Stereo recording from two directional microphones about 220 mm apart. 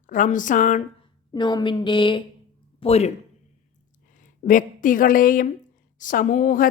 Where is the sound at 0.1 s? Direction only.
35° left (ahead or behind).